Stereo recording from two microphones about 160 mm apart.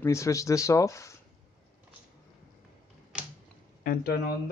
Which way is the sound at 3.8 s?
70° left (ahead or behind).